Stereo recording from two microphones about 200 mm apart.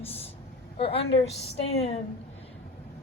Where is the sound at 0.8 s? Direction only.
30° left (ahead or behind).